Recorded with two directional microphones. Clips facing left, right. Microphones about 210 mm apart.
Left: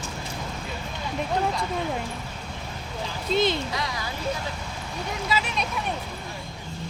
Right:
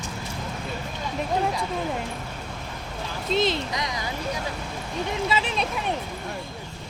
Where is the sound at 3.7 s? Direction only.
20° right (ahead or behind).